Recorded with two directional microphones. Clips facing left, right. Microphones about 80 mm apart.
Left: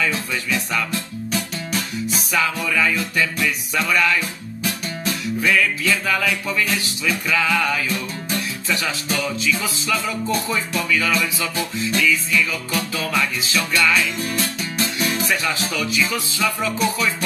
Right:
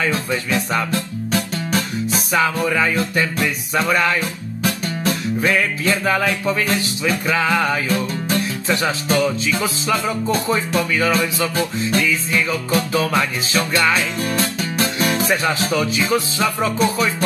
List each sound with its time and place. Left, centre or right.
0.0 s music: right
2.3 s music: right